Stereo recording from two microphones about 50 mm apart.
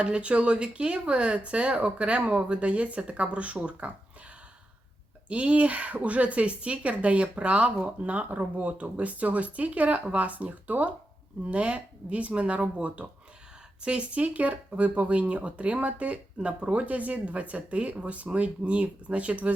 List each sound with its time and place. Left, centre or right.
0.0 s speech: right
5.3 s speech: right